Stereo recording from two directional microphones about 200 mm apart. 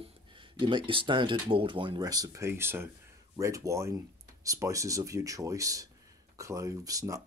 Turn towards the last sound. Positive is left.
turn(degrees=-15)  # may be behind; listen again after turning